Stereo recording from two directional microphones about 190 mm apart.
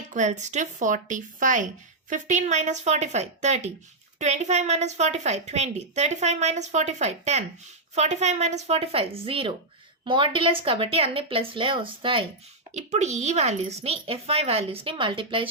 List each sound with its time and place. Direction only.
0.1 s a woman's voice: 40° right (ahead or behind)